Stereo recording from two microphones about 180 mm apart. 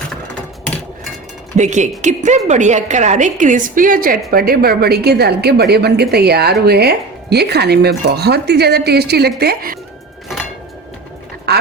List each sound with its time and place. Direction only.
1.5 s a woman's voice: 40° right (ahead or behind); by 9.7 s 60° right (ahead or behind)
11.5 s duck: 65° right (ahead or behind)